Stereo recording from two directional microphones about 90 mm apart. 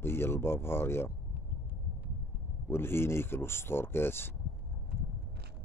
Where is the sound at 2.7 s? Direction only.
25° left (ahead or behind).